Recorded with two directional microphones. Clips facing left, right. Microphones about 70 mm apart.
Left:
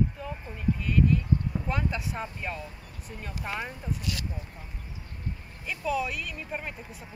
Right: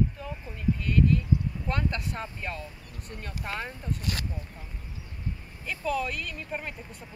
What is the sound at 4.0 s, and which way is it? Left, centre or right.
Speech, right.